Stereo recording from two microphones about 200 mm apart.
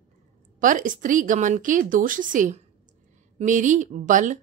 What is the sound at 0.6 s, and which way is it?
A woman's voice, 40° right (ahead or behind).